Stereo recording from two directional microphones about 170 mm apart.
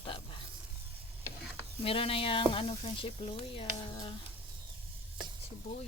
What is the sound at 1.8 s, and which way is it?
Speech, 35° left (ahead or behind).